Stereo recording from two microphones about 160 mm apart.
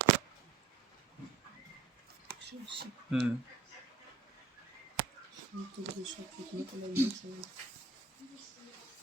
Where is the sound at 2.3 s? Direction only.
70° right (ahead or behind).